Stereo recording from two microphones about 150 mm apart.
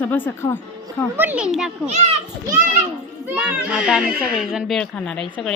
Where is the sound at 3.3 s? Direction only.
5° right (ahead or behind).